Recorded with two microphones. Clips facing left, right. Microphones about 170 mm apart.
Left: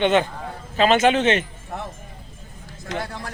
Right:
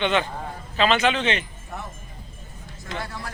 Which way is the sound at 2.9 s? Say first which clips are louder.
Left 4 dB; 50° left (ahead or behind).